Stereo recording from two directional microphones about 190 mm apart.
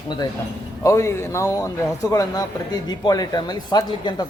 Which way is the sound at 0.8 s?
15° left (ahead or behind).